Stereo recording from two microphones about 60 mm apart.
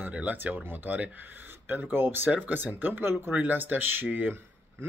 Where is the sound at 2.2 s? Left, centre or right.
Right.